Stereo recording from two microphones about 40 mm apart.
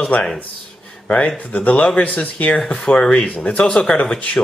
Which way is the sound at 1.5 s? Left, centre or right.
Left.